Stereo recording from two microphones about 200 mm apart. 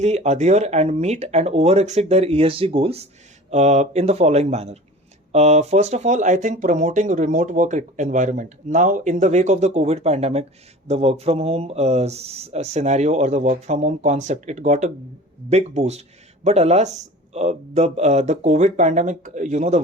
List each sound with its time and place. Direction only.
0.0 s speech: 35° right (ahead or behind)